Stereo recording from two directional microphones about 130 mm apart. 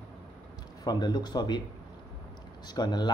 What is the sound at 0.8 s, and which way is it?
Speech, 35° left (ahead or behind).